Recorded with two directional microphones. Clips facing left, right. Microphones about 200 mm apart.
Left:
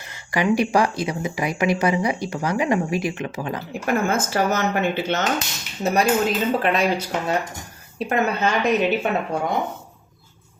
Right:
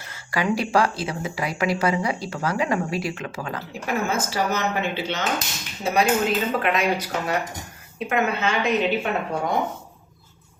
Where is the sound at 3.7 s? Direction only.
50° left (ahead or behind).